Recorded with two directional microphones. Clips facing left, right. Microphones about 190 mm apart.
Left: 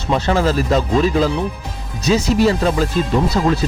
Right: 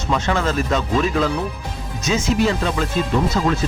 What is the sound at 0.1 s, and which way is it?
A man's voice, 35° left (ahead or behind).